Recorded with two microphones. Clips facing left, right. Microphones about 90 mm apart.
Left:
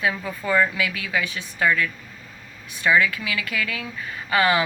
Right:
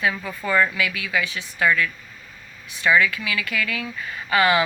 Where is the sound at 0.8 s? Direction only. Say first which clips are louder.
Right 1 dB; 35° left (ahead or behind).